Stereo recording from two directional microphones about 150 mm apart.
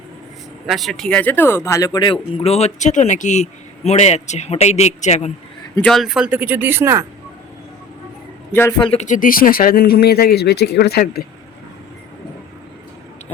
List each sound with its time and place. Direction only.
0.7 s speech: centre (ahead or behind); by 2.1 s 25° left (ahead or behind)
2.3 s speech: 45° left (ahead or behind)
5.8 s speech: centre (ahead or behind); by 7.0 s 15° right (ahead or behind)
8.8 s speech: 40° left (ahead or behind)
9.0 s speech: 60° left (ahead or behind); by 11.3 s 90° left